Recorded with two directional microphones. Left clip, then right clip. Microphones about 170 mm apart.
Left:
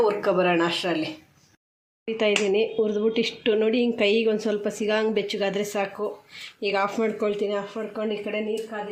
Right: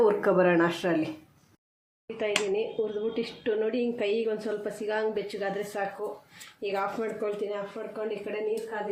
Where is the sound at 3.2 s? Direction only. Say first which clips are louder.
Left 6 dB; 60° left (ahead or behind).